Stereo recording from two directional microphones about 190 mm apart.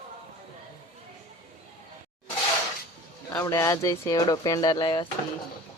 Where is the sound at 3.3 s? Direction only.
15° left (ahead or behind).